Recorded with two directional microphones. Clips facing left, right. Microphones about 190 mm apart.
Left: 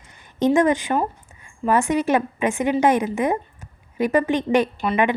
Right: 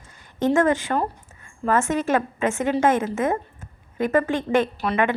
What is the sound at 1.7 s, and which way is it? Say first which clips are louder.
A woman's voice: left 2 dB; 15° left (ahead or behind).